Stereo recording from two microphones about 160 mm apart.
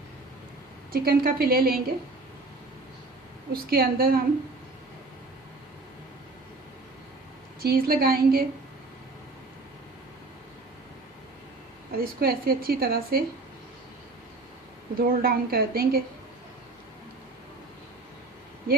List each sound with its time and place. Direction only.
0.9 s a woman's voice: 75° right (ahead or behind)
3.5 s a woman's voice: 70° right (ahead or behind)
7.6 s a woman's voice: 70° right (ahead or behind)
11.9 s a woman's voice: 70° right (ahead or behind)
14.9 s a woman's voice: 65° right (ahead or behind)